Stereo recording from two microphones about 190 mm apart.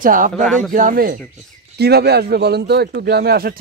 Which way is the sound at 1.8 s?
60° right (ahead or behind).